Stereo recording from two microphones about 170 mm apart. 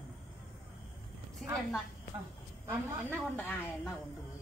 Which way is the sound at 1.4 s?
5° left (ahead or behind).